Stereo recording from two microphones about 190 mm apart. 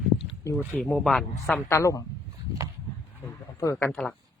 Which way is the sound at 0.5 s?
Centre (ahead or behind).